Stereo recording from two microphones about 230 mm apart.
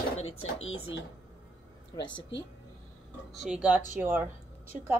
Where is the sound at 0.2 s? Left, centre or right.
Left.